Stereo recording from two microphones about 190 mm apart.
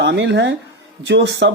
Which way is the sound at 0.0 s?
65° right (ahead or behind).